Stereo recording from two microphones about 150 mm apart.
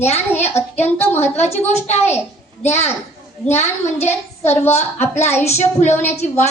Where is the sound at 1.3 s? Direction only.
45° left (ahead or behind).